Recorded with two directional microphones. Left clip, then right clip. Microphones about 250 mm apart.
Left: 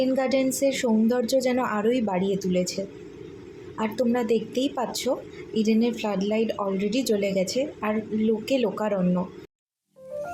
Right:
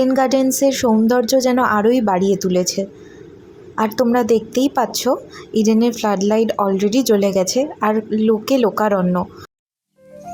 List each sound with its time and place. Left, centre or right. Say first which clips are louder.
0.0 s speech: right 8 dB; right